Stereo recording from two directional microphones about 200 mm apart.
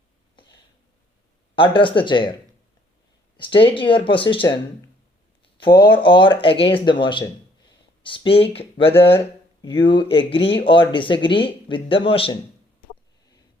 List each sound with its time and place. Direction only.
1.5 s speech: 25° left (ahead or behind)
3.3 s speech: 25° left (ahead or behind)
5.5 s speech: 20° left (ahead or behind)
8.9 s speech: 10° left (ahead or behind); by 12.4 s 25° left (ahead or behind)